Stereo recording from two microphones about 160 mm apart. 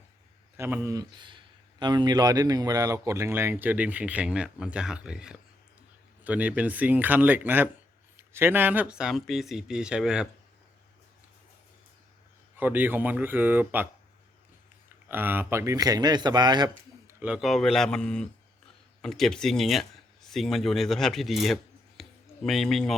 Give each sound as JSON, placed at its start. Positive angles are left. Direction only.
{"t": 0.5, "sound": "speech", "side_deg": -15}
{"t": 1.8, "sound": "speech", "side_deg": -25}
{"t": 12.5, "sound": "speech", "side_deg": -10}
{"t": 15.1, "sound": "speech", "side_deg": -15}
{"t": 16.6, "sound": "speech", "side_deg": -10}